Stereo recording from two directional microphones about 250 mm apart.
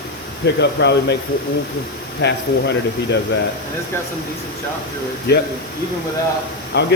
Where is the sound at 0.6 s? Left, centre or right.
Left.